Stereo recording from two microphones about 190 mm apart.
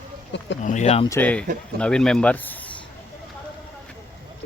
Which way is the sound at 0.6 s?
40° left (ahead or behind).